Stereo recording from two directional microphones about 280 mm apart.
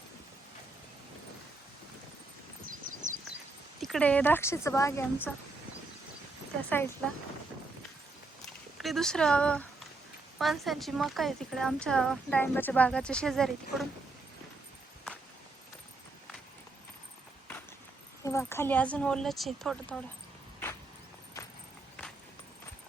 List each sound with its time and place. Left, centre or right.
2.6 s a sound: right
3.8 s speech: centre
8.8 s a woman's voice: centre
18.2 s a woman's voice: centre